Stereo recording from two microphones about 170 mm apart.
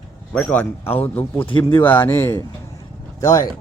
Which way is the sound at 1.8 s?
10° left (ahead or behind).